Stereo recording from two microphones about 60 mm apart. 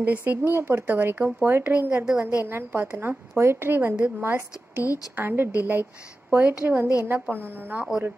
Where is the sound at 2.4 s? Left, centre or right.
Right.